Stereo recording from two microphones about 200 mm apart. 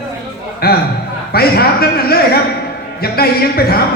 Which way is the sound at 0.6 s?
50° left (ahead or behind).